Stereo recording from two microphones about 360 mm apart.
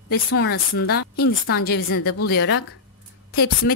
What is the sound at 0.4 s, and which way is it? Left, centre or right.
Speech, left.